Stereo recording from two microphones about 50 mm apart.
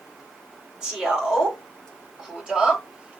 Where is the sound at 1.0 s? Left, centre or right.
Centre.